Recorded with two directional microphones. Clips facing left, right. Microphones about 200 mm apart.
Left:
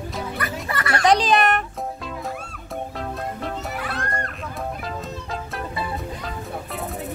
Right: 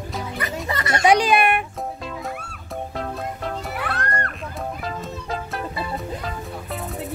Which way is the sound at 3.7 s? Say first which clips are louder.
Right 2 dB; 65° right (ahead or behind).